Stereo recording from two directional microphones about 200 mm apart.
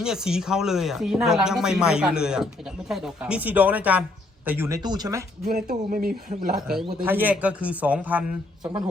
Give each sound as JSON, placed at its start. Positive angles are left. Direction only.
{"t": 0.0, "sound": "a man's voice", "side_deg": -5}
{"t": 5.5, "sound": "speech", "side_deg": -45}
{"t": 7.0, "sound": "a man's voice", "side_deg": -10}